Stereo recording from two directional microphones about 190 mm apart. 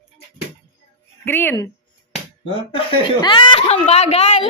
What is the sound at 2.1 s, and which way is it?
Speech, 30° left (ahead or behind).